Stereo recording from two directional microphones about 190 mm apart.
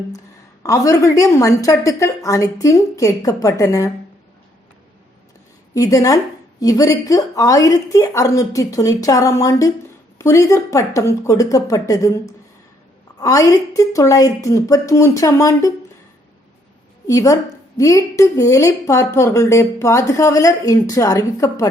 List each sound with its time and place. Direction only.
0.6 s a woman's voice: 15° left (ahead or behind)
5.7 s a woman's voice: 20° left (ahead or behind)
17.1 s a woman's voice: 20° left (ahead or behind)